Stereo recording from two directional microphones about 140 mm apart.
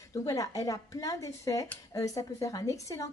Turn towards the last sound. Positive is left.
turn(degrees=20)  # may be behind; listen again after turning